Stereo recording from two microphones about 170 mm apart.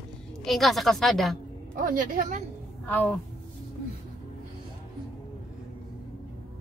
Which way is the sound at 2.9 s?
10° left (ahead or behind).